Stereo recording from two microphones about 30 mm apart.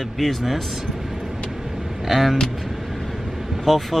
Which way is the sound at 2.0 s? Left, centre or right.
Centre.